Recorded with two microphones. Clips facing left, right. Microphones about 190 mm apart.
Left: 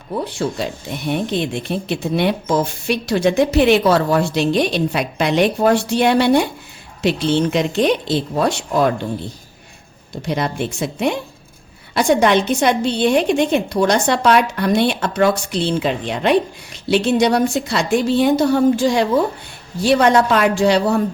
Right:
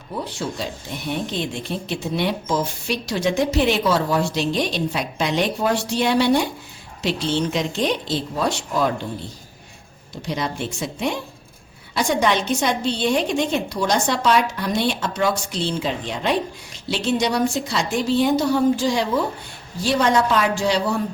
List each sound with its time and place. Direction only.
0.3 s a woman's voice: 55° left (ahead or behind)
10.2 s a woman's voice: 60° left (ahead or behind)